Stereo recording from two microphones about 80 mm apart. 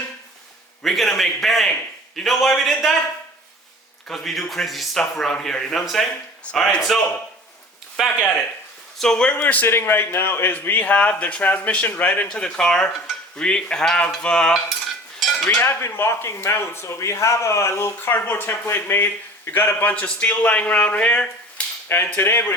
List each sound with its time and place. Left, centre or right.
0.8 s speech: centre
4.1 s speech: centre
6.4 s a man's voice: centre
9.4 s a man's voice: left
15.2 s a sound: centre
15.5 s a man's voice: left; by 21.2 s centre
21.8 s a man's voice: left